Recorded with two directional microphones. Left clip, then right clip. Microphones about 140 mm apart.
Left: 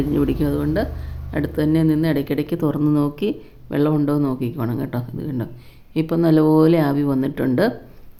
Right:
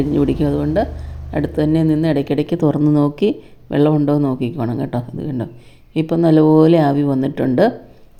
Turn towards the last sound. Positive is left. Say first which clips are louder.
# right 4 dB
turn(degrees=-10)  # may be behind; listen again after turning